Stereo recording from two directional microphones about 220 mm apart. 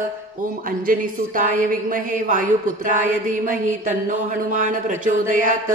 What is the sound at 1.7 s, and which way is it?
Speech, 40° right (ahead or behind).